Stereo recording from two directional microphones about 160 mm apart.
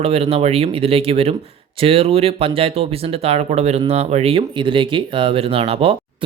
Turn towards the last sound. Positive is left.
turn(degrees=-35)  # may be behind; listen again after turning